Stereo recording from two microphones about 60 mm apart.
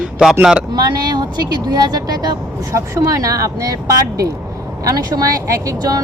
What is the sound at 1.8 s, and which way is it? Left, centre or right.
Speech, right.